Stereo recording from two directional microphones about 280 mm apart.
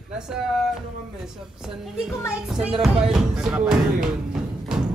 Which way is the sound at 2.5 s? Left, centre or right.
Centre.